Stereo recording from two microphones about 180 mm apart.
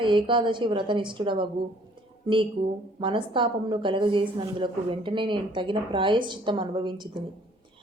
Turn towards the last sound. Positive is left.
turn(degrees=-25)  # may be behind; listen again after turning